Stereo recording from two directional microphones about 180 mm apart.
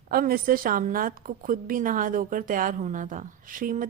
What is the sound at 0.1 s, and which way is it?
A woman's voice, 55° right (ahead or behind).